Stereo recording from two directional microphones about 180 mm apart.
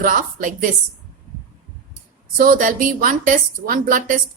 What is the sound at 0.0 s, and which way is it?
Speech, 50° right (ahead or behind).